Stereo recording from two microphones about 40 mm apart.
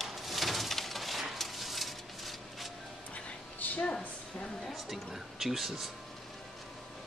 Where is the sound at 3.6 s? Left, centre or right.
Left.